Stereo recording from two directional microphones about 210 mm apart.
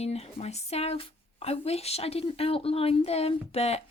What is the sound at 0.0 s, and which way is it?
Speech, 30° left (ahead or behind).